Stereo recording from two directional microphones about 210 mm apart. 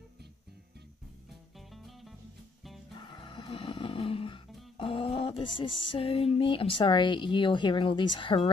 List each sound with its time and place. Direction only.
1.7 s music: centre (ahead or behind)
3.0 s music: 25° left (ahead or behind)